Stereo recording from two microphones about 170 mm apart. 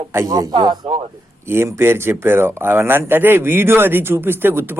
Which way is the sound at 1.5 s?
15° right (ahead or behind).